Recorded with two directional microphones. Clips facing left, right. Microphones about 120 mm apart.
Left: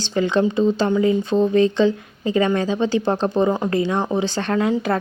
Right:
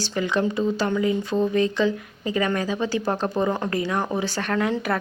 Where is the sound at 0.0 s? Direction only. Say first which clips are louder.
Left 5 dB; 25° left (ahead or behind).